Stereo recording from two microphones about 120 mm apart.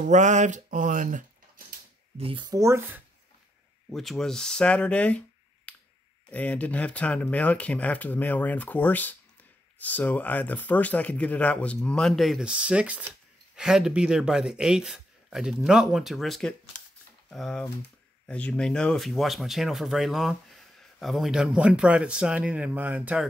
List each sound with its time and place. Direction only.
0.0 s speech: 90° right
2.1 s speech: 50° right (ahead or behind)
2.4 s speech: 25° right (ahead or behind)
3.9 s speech: centre (ahead or behind)
5.7 s finger snapping: 10° left (ahead or behind)
6.3 s speech: 10° left (ahead or behind); by 23.2 s 15° right (ahead or behind)